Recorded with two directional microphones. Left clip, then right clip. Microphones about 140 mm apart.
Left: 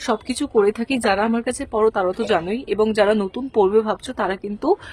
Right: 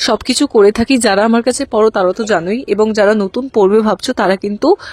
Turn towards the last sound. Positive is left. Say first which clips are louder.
# right 10 dB
turn(degrees=-45)  # may be behind; listen again after turning